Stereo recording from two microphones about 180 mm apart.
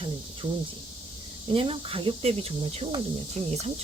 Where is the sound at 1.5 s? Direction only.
30° right (ahead or behind).